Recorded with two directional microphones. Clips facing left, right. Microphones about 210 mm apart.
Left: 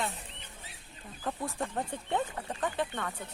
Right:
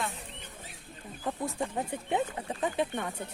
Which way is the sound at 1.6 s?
5° right (ahead or behind).